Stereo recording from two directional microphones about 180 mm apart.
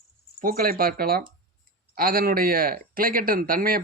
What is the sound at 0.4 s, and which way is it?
Speech, 55° right (ahead or behind).